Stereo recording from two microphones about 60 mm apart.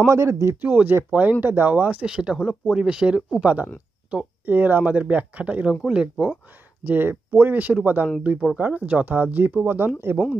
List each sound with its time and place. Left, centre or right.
0.1 s speech: right
0.6 s speech: right
2.0 s speech: centre
5.7 s speech: centre
6.8 s speech: right